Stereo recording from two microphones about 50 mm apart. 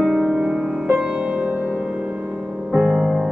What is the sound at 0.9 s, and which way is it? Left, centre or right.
Music, right.